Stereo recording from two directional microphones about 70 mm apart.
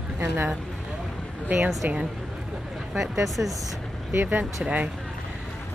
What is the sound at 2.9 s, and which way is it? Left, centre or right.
Speech, centre.